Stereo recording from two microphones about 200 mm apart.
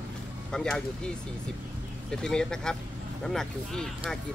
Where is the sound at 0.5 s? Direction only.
5° left (ahead or behind).